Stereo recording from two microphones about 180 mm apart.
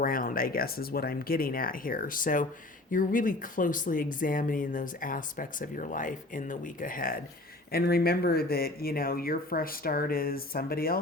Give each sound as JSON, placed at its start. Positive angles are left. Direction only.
{"t": 0.0, "sound": "speech", "side_deg": 50}